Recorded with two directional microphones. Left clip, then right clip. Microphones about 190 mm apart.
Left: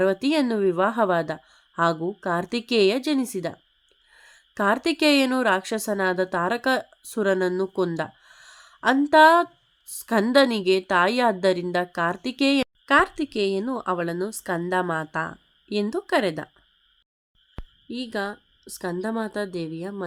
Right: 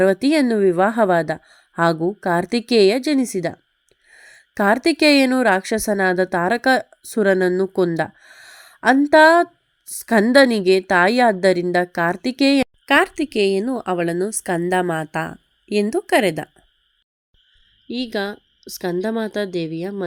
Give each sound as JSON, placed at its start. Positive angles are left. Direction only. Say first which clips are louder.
{"t": 0.0, "sound": "a woman's voice", "louder": "right 6 dB", "side_deg": -25}
{"t": 17.8, "sound": "a woman's voice", "louder": "right 5 dB", "side_deg": -20}